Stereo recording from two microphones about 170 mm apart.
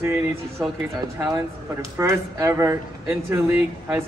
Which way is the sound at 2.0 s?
15° right (ahead or behind).